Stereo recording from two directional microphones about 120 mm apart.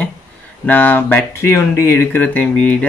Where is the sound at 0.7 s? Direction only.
15° left (ahead or behind).